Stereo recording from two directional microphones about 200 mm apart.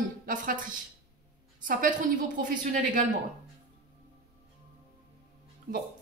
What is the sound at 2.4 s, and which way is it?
Speech, 40° right (ahead or behind).